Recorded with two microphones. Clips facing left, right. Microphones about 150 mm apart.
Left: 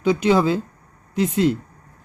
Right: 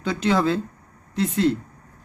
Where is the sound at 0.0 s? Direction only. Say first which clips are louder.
Left 4 dB; 10° left (ahead or behind).